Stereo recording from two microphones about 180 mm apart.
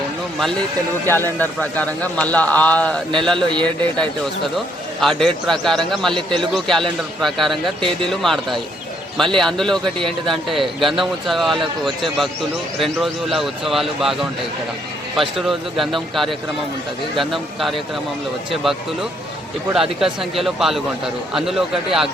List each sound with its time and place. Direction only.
1.0 s a man's voice: 10° left (ahead or behind)
3.3 s a man's voice: 25° right (ahead or behind)
4.5 s speech: centre (ahead or behind)
7.8 s a man's voice: 30° right (ahead or behind)
8.1 s speech: centre (ahead or behind)
19.7 s speech: centre (ahead or behind)